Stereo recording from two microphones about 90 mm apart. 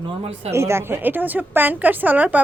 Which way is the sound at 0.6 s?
30° right (ahead or behind).